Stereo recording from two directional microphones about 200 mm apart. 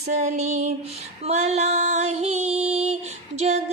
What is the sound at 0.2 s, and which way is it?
Female singing, 35° right (ahead or behind).